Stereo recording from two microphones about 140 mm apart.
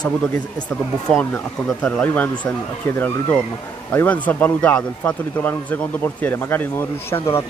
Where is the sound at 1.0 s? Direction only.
10° left (ahead or behind).